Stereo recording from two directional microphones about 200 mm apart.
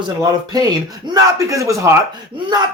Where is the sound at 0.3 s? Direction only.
20° right (ahead or behind).